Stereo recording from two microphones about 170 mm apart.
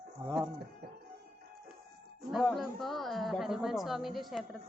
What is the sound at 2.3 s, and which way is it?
A woman's voice, centre (ahead or behind).